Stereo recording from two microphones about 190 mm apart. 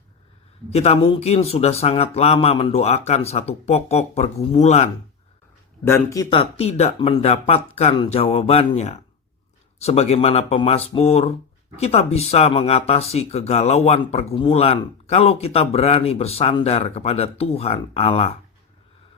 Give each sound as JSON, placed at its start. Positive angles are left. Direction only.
{"t": 0.7, "sound": "speech", "side_deg": 35}
{"t": 5.8, "sound": "speech", "side_deg": 15}
{"t": 6.3, "sound": "speech", "side_deg": 30}